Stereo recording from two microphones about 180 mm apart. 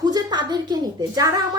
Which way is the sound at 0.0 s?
20° right (ahead or behind).